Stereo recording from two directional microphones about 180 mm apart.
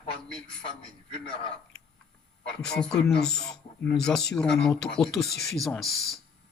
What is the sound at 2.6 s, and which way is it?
Speech, 5° left (ahead or behind).